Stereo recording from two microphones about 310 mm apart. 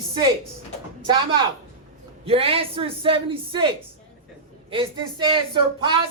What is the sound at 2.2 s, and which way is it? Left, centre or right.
Speech, centre.